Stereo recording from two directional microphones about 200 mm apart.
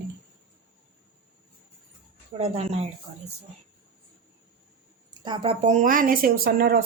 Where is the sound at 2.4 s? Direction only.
30° right (ahead or behind).